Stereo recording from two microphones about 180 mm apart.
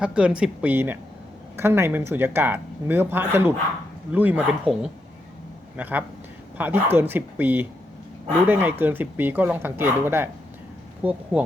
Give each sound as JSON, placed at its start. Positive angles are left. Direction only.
{"t": 0.0, "sound": "speech", "side_deg": -5}